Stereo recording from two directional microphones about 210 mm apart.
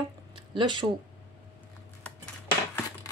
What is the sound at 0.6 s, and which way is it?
Speech, 20° right (ahead or behind).